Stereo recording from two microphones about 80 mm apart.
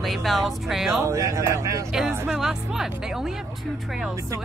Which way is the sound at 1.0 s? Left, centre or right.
Right.